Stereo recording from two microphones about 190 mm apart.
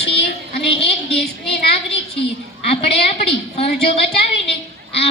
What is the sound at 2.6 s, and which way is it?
A woman's voice, 30° left (ahead or behind).